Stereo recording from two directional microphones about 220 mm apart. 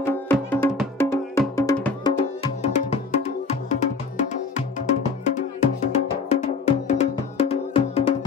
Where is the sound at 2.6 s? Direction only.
30° left (ahead or behind).